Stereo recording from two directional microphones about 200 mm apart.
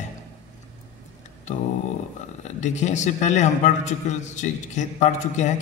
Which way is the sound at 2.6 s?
35° left (ahead or behind).